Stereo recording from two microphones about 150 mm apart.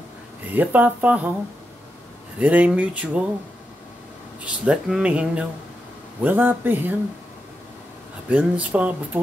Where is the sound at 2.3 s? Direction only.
10° right (ahead or behind).